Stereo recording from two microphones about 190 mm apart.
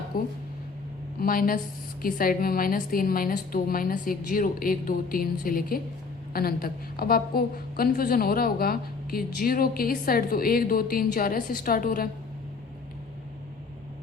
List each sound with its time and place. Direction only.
0.1 s a woman's voice: 50° left (ahead or behind)